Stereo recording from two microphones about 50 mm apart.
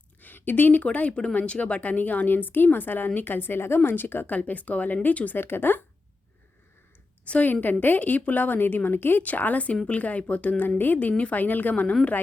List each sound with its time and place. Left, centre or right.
0.2 s a woman's voice: left
5.4 s a woman's voice: left
7.3 s a woman's voice: left